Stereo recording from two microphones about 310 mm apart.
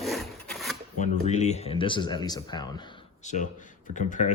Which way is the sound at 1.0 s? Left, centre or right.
Left.